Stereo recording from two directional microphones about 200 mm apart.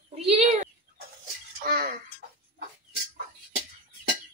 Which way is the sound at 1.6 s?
50° right (ahead or behind).